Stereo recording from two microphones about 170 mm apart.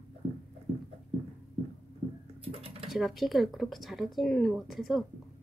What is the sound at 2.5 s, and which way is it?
Typing, 35° right (ahead or behind).